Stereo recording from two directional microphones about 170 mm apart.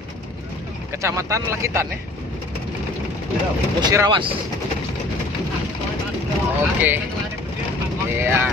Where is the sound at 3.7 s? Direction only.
25° right (ahead or behind).